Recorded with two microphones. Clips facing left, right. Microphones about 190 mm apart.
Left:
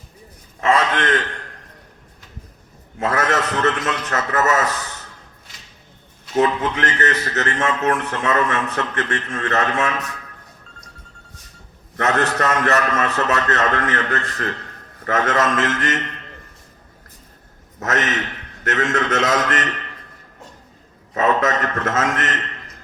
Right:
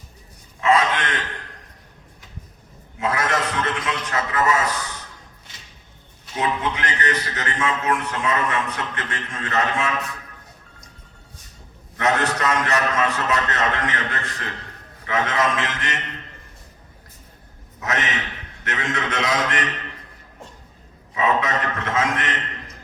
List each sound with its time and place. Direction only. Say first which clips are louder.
0.6 s a sound: left 1 dB; 50° left (ahead or behind)
3.0 s a man's voice: left 3 dB; 50° left (ahead or behind)
6.3 s a man's voice: left 6 dB; 50° left (ahead or behind)
11.9 s a man's voice: left 2 dB; 50° left (ahead or behind)
17.7 s a man's voice: left 4 dB; 50° left (ahead or behind)
21.1 s a man's voice: left 3 dB; 50° left (ahead or behind)